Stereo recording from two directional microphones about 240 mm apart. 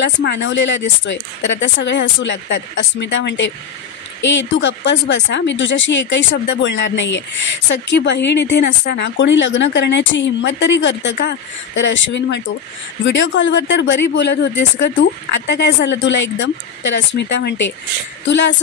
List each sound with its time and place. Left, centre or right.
0.0 s speech: left